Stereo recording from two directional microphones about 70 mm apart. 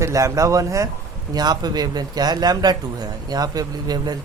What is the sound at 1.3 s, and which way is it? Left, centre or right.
Speech, right.